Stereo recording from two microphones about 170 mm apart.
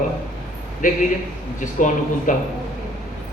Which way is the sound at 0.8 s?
50° left (ahead or behind).